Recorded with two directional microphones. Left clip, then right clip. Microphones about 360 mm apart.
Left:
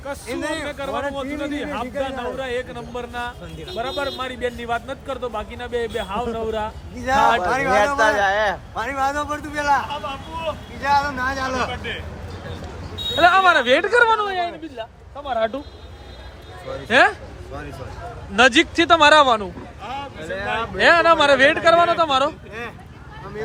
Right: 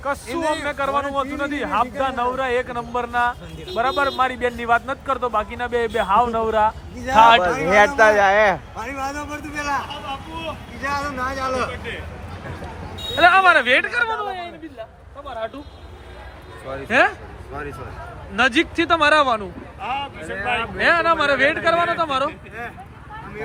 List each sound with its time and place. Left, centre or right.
0.0 s a man's voice: centre
7.9 s speech: centre
8.7 s speech: centre
13.1 s speech: centre; by 15.5 s left
16.9 s a man's voice: centre
18.3 s a man's voice: centre
20.3 s speech: left
20.7 s a man's voice: centre